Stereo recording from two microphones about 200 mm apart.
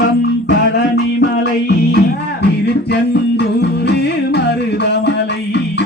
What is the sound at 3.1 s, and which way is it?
Music, 55° left (ahead or behind).